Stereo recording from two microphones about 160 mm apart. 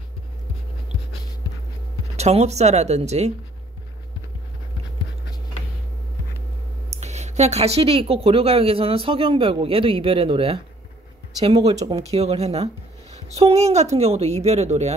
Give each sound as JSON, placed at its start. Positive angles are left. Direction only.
{"t": 2.1, "sound": "speech", "side_deg": -40}
{"t": 6.9, "sound": "a woman's voice", "side_deg": -45}
{"t": 11.6, "sound": "a woman's voice", "side_deg": -40}